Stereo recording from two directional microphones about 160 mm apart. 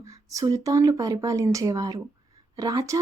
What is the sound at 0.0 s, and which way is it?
A woman's voice, 20° right (ahead or behind).